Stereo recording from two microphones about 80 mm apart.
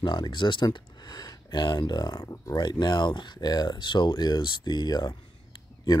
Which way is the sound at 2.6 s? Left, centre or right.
Left.